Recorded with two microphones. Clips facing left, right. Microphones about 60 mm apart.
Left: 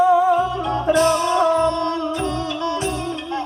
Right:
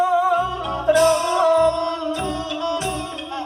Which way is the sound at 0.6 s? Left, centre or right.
Left.